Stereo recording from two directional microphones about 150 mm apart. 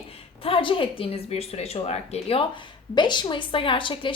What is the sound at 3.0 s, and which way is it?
A woman's voice, 30° left (ahead or behind).